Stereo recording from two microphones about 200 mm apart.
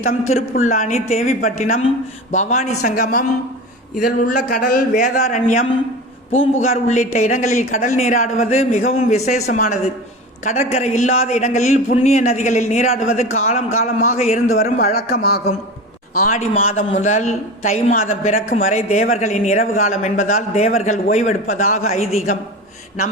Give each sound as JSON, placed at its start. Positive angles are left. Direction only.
{"t": 0.1, "sound": "a man's voice", "side_deg": 40}
{"t": 6.3, "sound": "a man's voice", "side_deg": 75}
{"t": 6.6, "sound": "a man's voice", "side_deg": 35}
{"t": 13.2, "sound": "a man's voice", "side_deg": 90}
{"t": 14.2, "sound": "a man's voice", "side_deg": 35}
{"t": 14.9, "sound": "speech", "side_deg": 55}
{"t": 16.1, "sound": "a man's voice", "side_deg": 40}